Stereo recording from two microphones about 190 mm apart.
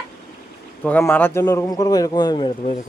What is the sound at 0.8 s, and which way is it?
Speech, 10° left (ahead or behind).